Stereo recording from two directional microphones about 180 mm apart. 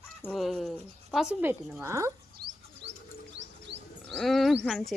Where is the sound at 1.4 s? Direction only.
10° right (ahead or behind).